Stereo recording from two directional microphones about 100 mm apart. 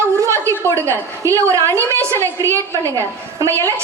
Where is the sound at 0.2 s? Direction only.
30° right (ahead or behind).